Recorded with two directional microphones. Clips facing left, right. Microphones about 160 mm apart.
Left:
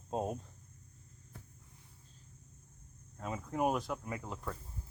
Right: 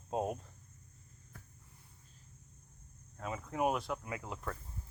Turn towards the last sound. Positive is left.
turn(degrees=-5)  # may be behind; listen again after turning